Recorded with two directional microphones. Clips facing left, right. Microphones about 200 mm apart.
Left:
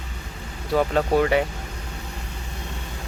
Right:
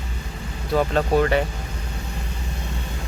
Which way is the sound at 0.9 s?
10° left (ahead or behind).